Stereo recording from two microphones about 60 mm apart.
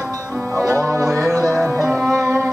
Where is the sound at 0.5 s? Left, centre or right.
Right.